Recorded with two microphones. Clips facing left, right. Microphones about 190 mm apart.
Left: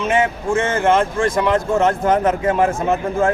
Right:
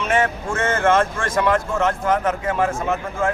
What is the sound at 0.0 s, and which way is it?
Speech, 15° left (ahead or behind).